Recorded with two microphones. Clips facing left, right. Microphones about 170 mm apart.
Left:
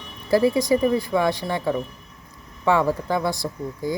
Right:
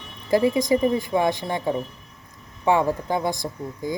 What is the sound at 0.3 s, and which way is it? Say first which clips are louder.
Speech: left 1 dB; 15° right (ahead or behind).